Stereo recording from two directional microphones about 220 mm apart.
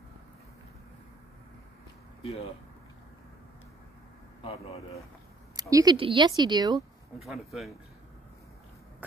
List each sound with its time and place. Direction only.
2.2 s speech: 25° left (ahead or behind)
4.4 s speech: 25° left (ahead or behind)
5.6 s a woman's voice: 15° right (ahead or behind)
7.2 s speech: centre (ahead or behind)